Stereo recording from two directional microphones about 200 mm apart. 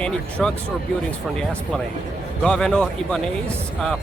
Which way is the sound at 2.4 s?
5° left (ahead or behind).